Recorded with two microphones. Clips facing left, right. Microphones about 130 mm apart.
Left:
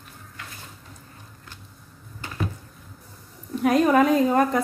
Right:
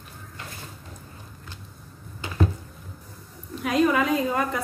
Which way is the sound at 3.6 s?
45° left (ahead or behind).